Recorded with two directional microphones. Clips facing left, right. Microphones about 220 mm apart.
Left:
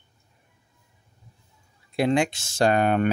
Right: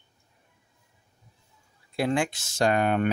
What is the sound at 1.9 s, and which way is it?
Speech, 20° left (ahead or behind).